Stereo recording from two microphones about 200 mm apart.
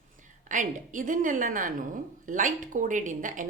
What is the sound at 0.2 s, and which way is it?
A woman's voice, 40° right (ahead or behind).